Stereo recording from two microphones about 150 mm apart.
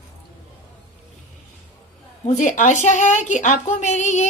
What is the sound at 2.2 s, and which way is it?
A woman's voice, 55° left (ahead or behind).